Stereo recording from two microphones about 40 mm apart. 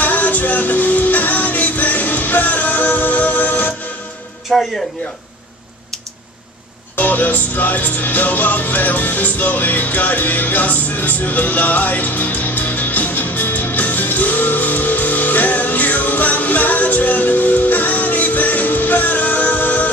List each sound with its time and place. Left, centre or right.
0.0 s music: left
4.5 s speech: centre
7.0 s music: left